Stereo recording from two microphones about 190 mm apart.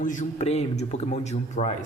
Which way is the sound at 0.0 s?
40° left (ahead or behind).